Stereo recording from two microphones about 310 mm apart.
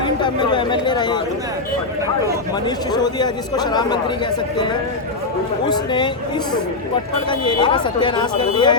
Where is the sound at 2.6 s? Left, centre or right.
Centre.